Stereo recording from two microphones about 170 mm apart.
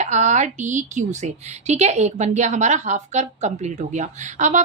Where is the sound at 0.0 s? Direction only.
45° right (ahead or behind).